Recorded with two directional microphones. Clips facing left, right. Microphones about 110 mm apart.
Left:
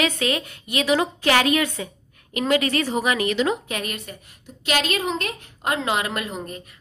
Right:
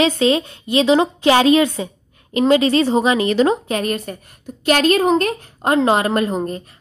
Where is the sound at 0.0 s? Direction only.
25° right (ahead or behind).